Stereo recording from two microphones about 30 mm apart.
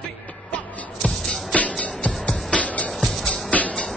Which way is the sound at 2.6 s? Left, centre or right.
Left.